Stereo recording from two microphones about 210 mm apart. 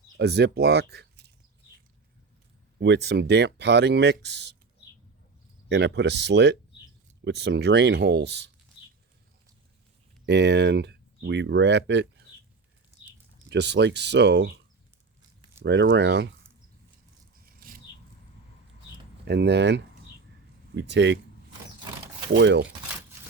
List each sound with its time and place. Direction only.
0.2 s speech: 50° right (ahead or behind)
2.8 s speech: 55° right (ahead or behind)
5.6 s speech: 55° right (ahead or behind)
10.2 s speech: 55° right (ahead or behind)
13.5 s speech: 55° right (ahead or behind)
15.6 s speech: 55° right (ahead or behind)
17.4 s a sound: 45° right (ahead or behind)
19.2 s speech: 55° right (ahead or behind)
22.3 s speech: 55° right (ahead or behind)